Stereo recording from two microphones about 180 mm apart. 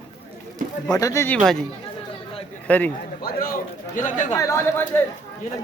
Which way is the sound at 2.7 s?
10° left (ahead or behind).